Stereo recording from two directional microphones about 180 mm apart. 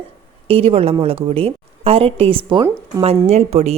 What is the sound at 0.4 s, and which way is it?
A woman's voice, 30° right (ahead or behind).